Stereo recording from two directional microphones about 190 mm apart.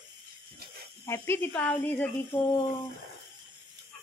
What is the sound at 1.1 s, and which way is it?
Speech, 10° left (ahead or behind).